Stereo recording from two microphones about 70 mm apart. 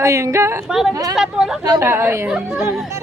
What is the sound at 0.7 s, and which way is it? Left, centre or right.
Speech, centre.